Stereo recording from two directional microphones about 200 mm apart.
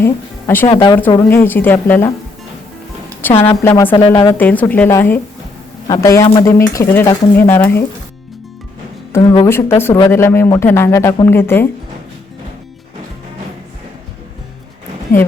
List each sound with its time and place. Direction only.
0.0 s speech: 10° left (ahead or behind)
0.7 s a woman's voice: 25° left (ahead or behind)
1.3 s speech: 10° left (ahead or behind)
3.2 s speech: 10° left (ahead or behind)
4.4 s speech: 10° left (ahead or behind)
9.2 s a woman's voice: 25° left (ahead or behind)
9.5 s speech: 10° left (ahead or behind)